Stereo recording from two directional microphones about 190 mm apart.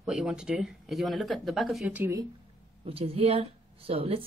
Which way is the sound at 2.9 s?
30° right (ahead or behind).